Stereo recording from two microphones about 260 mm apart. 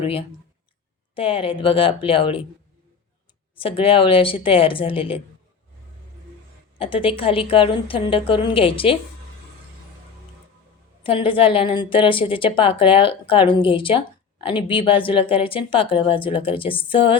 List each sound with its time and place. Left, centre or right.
0.0 s a woman's voice: left
3.6 s a woman's voice: left
6.7 s a woman's voice: centre
11.0 s a woman's voice: centre